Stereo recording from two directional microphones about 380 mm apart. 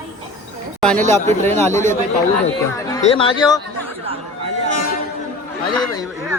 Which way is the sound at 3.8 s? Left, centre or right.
Centre.